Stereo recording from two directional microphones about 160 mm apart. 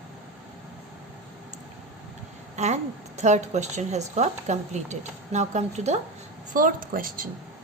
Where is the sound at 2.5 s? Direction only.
45° right (ahead or behind).